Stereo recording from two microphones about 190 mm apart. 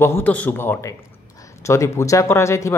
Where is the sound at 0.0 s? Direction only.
10° left (ahead or behind).